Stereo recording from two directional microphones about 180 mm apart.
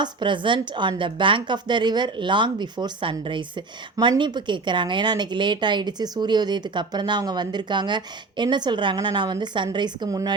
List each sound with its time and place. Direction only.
0.0 s a woman's voice: 25° right (ahead or behind)